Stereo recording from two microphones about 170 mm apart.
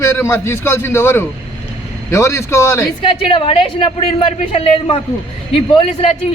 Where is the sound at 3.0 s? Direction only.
30° left (ahead or behind).